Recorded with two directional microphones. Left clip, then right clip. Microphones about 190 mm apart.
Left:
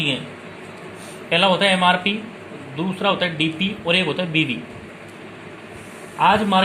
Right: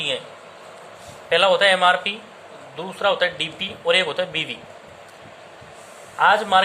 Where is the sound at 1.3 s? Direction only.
20° right (ahead or behind).